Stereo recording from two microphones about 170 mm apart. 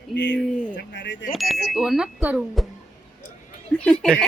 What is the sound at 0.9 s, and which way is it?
Speech, 90° left.